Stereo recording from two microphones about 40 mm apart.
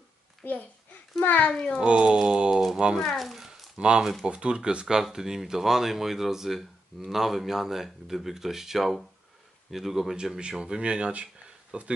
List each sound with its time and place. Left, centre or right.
0.4 s a child's voice: left
1.5 s a child's voice: centre
1.9 s speech: right
2.5 s speech: centre
3.2 s a sound: centre
3.7 s speech: right
4.0 s speech: centre
4.3 s speech: right; by 10.1 s centre
10.4 s speech: right